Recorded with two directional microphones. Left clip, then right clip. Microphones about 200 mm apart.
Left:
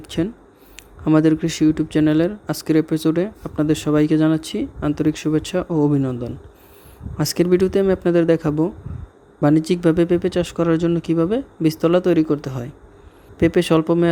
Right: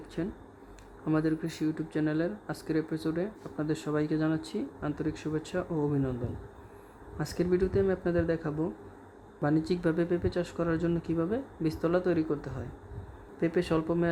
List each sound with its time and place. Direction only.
0.1 s speech: 35° left (ahead or behind)
7.2 s speech: 35° left (ahead or behind)